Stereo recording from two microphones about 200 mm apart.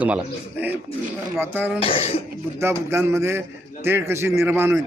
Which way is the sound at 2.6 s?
15° right (ahead or behind).